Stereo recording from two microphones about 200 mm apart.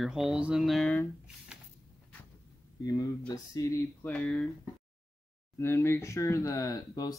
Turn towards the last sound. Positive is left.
turn(degrees=15)  # may be behind; listen again after turning